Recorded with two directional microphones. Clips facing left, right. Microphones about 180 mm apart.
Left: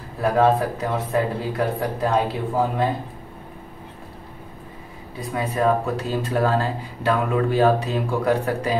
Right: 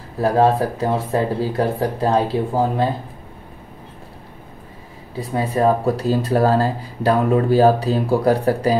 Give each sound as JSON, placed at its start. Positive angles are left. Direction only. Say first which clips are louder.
{"t": 0.2, "sound": "speech", "louder": "right 2 dB", "side_deg": -30}
{"t": 5.3, "sound": "speech", "louder": "right 3 dB", "side_deg": -30}